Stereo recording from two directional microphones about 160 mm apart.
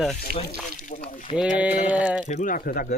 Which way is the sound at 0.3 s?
75° right (ahead or behind).